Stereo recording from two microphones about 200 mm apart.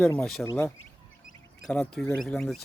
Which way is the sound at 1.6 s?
5° left (ahead or behind).